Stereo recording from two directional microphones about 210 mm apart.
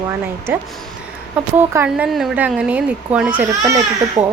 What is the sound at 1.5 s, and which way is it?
A woman's voice, 10° right (ahead or behind).